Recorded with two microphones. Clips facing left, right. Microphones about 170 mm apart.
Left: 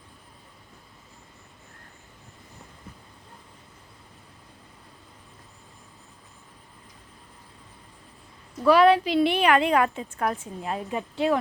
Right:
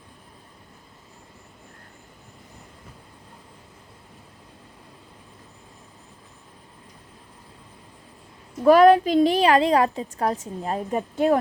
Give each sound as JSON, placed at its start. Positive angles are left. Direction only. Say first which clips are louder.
{"t": 8.6, "sound": "a woman's voice", "louder": "right 4 dB", "side_deg": -45}